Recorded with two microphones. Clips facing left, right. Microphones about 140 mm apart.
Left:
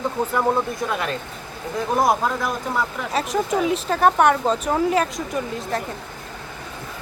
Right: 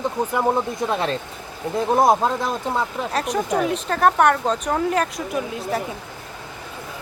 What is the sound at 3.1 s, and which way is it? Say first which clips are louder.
Speech: left 1 dB; centre (ahead or behind).